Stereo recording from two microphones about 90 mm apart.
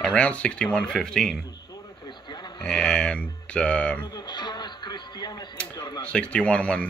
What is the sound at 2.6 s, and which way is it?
Speech, 10° left (ahead or behind).